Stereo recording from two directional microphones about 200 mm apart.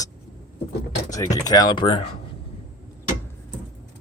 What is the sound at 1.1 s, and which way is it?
Speech, 15° left (ahead or behind).